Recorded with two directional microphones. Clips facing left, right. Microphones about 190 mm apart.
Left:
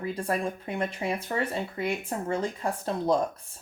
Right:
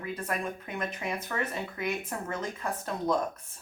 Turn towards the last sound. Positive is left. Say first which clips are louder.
# left 4 dB
turn(degrees=30)  # may be behind; listen again after turning